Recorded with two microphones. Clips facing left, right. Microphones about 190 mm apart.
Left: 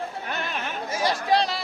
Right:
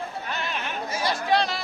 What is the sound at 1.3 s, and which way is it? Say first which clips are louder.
Chatter: even; 35° left (ahead or behind).